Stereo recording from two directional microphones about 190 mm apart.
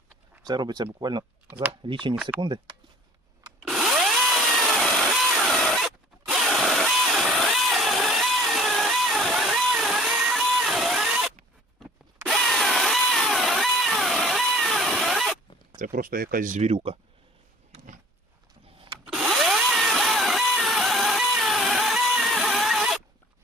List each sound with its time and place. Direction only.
0.4 s speech: 20° right (ahead or behind)
3.6 s power tool: centre (ahead or behind)
15.8 s speech: 45° right (ahead or behind); by 17.0 s 30° right (ahead or behind)
19.0 s vehicle: 5° right (ahead or behind)